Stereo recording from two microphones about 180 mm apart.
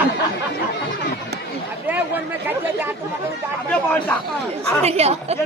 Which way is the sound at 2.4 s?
10° right (ahead or behind).